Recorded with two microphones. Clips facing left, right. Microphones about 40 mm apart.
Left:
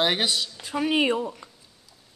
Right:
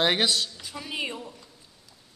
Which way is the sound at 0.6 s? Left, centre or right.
Left.